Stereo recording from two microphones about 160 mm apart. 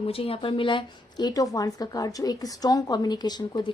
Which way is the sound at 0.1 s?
35° left (ahead or behind).